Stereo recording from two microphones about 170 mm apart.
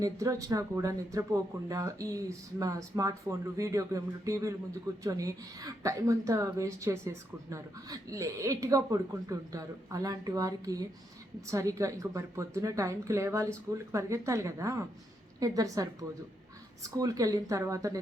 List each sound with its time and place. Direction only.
0.0 s a woman's voice: 20° right (ahead or behind)